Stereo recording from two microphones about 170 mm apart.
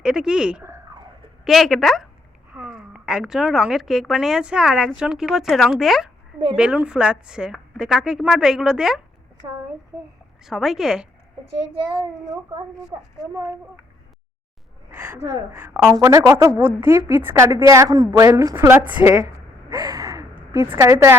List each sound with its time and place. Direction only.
0.0 s speech: 5° right (ahead or behind)
0.6 s a sound: 15° right (ahead or behind)
1.5 s speech: centre (ahead or behind)
9.4 s a child's voice: 25° right (ahead or behind)
10.4 s speech: centre (ahead or behind)
14.8 s a woman's voice: 15° right (ahead or behind)